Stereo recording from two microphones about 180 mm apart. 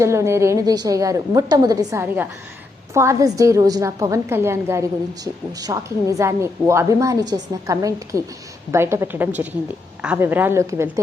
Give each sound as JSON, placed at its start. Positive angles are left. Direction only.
{"t": 0.0, "sound": "a woman's voice", "side_deg": -15}